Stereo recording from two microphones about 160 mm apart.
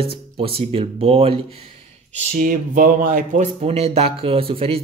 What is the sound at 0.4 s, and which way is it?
Speech, 35° right (ahead or behind).